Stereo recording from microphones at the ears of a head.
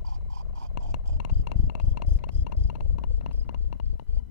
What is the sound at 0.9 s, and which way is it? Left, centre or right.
Heart sounds, left.